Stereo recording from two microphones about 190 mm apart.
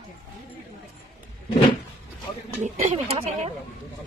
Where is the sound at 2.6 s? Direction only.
30° right (ahead or behind).